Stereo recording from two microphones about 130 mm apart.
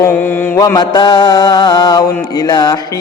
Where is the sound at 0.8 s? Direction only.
30° left (ahead or behind).